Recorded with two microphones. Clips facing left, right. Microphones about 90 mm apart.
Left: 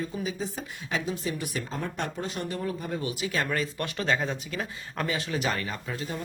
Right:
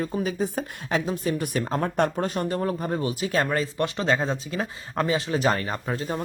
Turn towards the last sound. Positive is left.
turn(degrees=-40)  # may be behind; listen again after turning